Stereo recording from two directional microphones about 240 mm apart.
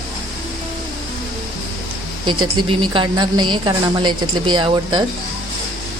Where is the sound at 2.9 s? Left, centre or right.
Centre.